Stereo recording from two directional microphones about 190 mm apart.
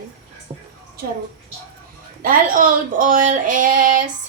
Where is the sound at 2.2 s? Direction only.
45° right (ahead or behind).